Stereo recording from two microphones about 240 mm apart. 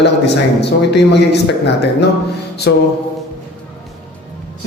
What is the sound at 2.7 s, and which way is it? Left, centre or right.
Mantra, left.